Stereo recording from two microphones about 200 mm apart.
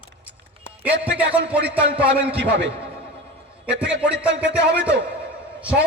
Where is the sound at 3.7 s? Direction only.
60° right (ahead or behind).